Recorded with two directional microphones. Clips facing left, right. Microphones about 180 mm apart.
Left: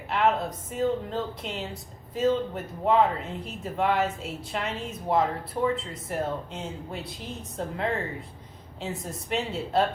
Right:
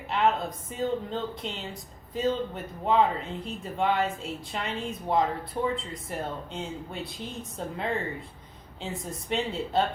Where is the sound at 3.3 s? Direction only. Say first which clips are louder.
Left 1 dB; centre (ahead or behind).